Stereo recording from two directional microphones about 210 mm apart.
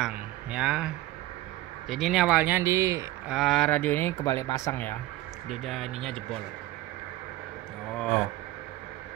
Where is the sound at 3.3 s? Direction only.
Centre (ahead or behind).